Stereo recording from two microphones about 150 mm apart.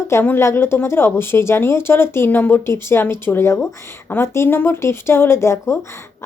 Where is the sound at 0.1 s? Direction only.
15° left (ahead or behind).